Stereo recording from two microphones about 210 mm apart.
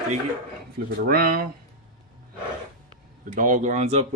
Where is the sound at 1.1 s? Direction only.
45° right (ahead or behind).